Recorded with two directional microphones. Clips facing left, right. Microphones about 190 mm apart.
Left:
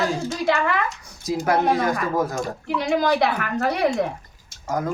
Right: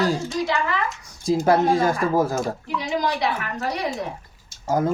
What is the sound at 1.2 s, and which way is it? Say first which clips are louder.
Speech: right 2 dB; 25° right (ahead or behind).